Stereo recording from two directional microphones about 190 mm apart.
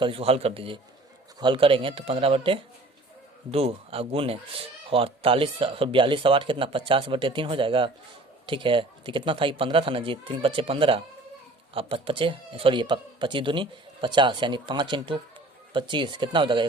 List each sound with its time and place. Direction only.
0.0 s speech: 30° right (ahead or behind)